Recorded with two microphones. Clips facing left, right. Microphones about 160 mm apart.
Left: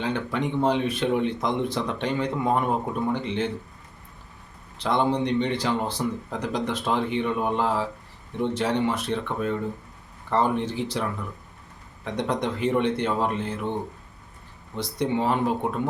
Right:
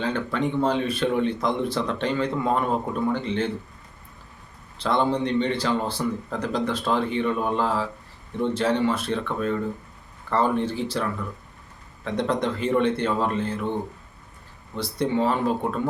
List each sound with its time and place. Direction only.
0.0 s speech: 15° left (ahead or behind)
4.8 s speech: 15° left (ahead or behind)
12.0 s speech: 15° left (ahead or behind)
14.8 s speech: 20° left (ahead or behind)